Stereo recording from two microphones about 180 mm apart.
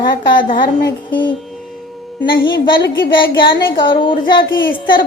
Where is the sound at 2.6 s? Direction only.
25° left (ahead or behind).